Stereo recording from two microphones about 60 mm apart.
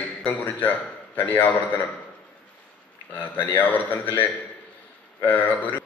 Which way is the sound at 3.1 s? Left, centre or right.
Left.